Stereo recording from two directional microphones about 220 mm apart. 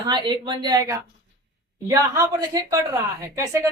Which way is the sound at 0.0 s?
20° right (ahead or behind).